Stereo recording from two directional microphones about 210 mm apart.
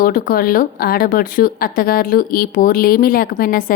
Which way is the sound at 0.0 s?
45° left (ahead or behind).